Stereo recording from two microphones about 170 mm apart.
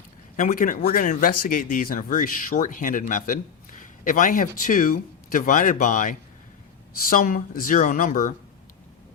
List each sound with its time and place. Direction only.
0.3 s speech: 55° left (ahead or behind)